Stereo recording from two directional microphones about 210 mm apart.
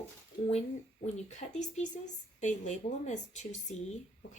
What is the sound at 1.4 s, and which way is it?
A woman's voice, 35° left (ahead or behind).